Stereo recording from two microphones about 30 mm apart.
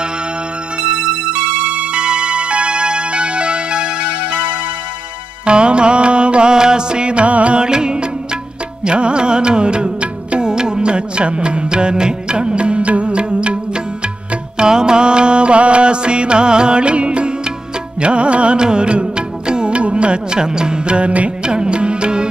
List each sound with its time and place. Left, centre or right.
0.7 s music: right
1.7 s music: right
5.4 s music: right
6.5 s music: right
7.5 s music: right
14.6 s music: right
18.6 s music: right